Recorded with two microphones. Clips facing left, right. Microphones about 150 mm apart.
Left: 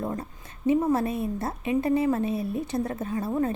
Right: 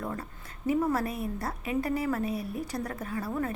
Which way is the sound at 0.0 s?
25° left (ahead or behind).